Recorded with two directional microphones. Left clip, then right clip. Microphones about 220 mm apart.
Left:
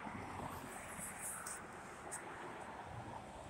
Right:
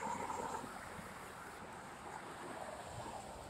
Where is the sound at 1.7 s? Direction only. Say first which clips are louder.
Right 1 dB; 55° right (ahead or behind).